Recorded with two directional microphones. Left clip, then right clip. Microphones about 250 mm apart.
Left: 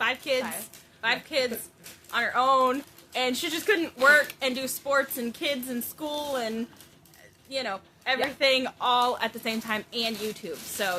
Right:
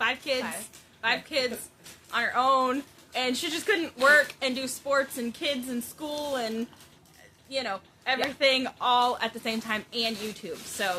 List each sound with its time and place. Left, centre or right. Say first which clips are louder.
0.0 s a woman's voice: left 1 dB; centre